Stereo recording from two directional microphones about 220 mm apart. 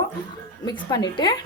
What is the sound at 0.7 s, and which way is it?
Speech, 20° left (ahead or behind).